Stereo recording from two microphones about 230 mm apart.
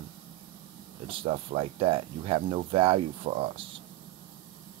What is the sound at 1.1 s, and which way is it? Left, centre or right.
Speech, right.